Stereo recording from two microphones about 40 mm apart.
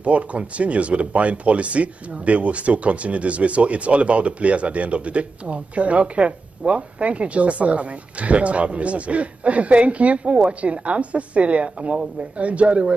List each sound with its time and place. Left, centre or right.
0.0 s speech: right